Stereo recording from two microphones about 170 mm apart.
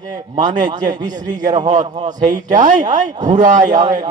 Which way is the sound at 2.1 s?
50° right (ahead or behind).